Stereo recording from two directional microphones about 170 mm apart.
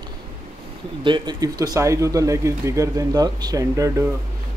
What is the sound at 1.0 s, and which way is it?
Speech, 25° right (ahead or behind).